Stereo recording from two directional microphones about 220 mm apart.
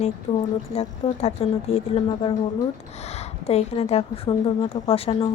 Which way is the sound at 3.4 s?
30° left (ahead or behind).